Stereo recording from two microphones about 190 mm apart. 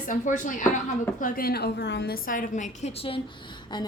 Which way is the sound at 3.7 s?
25° left (ahead or behind).